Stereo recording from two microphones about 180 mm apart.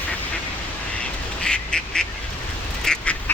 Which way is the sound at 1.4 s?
5° left (ahead or behind).